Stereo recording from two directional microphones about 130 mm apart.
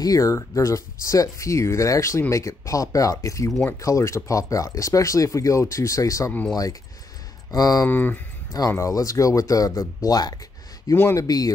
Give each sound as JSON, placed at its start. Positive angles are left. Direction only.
{"t": 0.0, "sound": "speech", "side_deg": 25}
{"t": 7.8, "sound": "speech", "side_deg": 15}
{"t": 8.5, "sound": "speech", "side_deg": 25}